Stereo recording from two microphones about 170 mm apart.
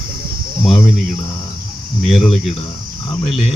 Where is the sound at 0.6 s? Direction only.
Centre (ahead or behind).